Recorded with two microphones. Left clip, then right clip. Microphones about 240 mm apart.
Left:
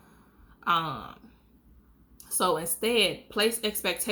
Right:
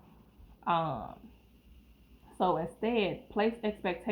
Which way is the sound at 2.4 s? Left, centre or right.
Left.